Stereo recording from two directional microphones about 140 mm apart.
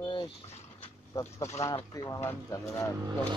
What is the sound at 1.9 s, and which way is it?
Speech, 25° left (ahead or behind).